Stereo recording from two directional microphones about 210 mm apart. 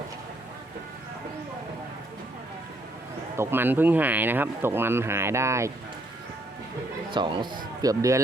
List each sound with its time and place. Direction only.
3.3 s speech: 10° right (ahead or behind)
7.1 s speech: 20° right (ahead or behind)